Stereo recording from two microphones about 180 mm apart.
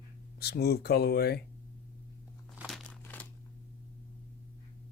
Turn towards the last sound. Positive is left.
turn(degrees=10)  # may be behind; listen again after turning